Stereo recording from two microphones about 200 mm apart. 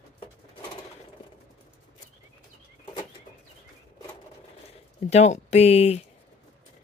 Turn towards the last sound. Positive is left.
turn(degrees=30)  # may be behind; listen again after turning